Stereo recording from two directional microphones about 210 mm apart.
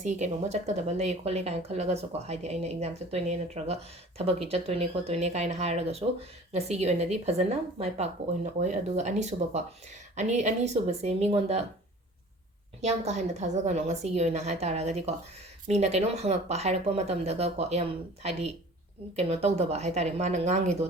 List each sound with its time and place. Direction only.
0.0 s speech: 35° right (ahead or behind)
12.8 s speech: 30° right (ahead or behind)